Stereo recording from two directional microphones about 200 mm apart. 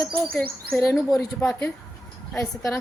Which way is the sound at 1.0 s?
Centre (ahead or behind).